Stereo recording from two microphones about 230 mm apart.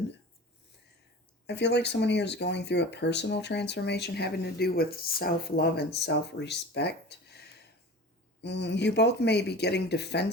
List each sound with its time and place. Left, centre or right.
1.5 s speech: left